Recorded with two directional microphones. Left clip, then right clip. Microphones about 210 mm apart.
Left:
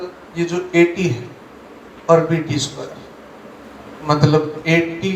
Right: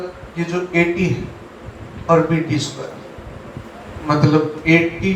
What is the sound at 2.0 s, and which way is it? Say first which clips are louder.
Speech: left 1 dB; 35° left (ahead or behind).